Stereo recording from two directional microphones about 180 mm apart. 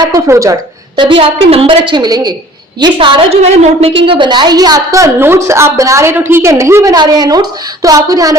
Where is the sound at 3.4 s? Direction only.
35° right (ahead or behind).